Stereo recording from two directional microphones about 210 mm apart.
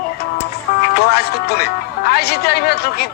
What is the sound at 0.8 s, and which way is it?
Speech, 50° left (ahead or behind).